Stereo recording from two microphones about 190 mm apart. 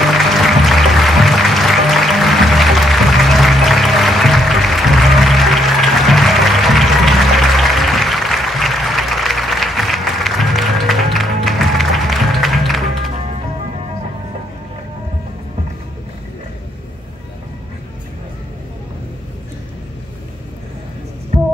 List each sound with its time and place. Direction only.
0.0 s music: centre (ahead or behind)